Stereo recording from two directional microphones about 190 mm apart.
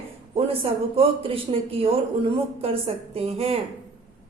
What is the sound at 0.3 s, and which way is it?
A woman's voice, 30° right (ahead or behind).